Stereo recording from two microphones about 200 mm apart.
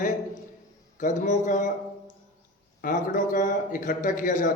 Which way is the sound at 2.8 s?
40° left (ahead or behind).